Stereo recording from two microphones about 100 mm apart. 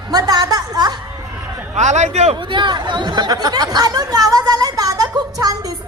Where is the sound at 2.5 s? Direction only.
50° right (ahead or behind).